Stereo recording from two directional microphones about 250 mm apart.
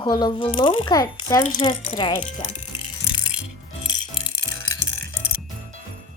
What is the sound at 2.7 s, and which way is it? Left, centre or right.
Music, centre.